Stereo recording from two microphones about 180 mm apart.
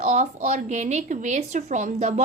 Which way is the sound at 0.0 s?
40° right (ahead or behind).